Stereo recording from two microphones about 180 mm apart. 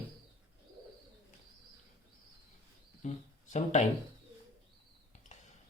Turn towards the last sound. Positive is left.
turn(degrees=40)  # may be behind; listen again after turning